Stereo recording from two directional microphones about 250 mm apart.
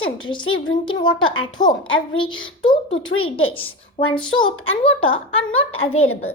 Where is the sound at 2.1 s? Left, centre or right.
Centre.